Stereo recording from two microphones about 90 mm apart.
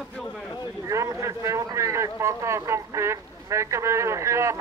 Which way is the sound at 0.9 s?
35° right (ahead or behind).